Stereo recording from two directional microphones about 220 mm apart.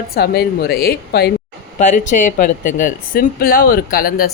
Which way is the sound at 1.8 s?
35° left (ahead or behind).